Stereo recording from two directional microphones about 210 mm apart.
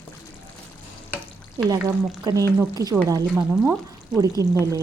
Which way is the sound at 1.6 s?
15° right (ahead or behind).